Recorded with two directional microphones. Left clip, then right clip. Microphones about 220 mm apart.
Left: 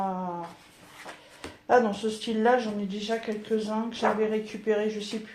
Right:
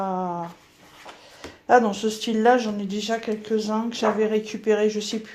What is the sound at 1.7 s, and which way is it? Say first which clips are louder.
Speech: right 5 dB; 50° right (ahead or behind).